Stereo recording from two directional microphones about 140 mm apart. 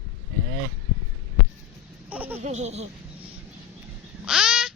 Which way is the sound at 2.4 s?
55° right (ahead or behind).